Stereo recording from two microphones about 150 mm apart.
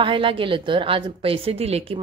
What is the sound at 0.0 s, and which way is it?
A woman's voice, 35° right (ahead or behind).